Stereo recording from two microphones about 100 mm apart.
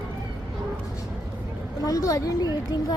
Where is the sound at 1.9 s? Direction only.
35° left (ahead or behind).